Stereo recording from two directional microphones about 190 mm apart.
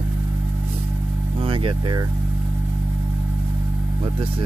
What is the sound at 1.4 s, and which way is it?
Speech, 30° right (ahead or behind).